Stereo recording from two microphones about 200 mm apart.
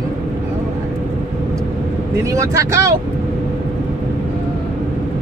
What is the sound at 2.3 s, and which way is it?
Speech, 15° right (ahead or behind).